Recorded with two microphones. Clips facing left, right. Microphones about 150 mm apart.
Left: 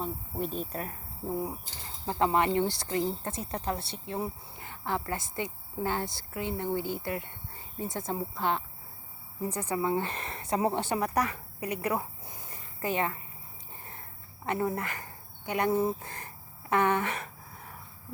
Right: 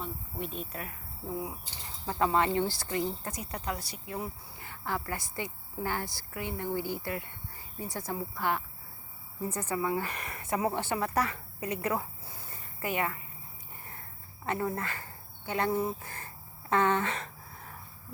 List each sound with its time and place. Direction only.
0.0 s speech: 35° left (ahead or behind)
2.0 s a woman's voice: 20° left (ahead or behind)
14.4 s speech: 20° left (ahead or behind)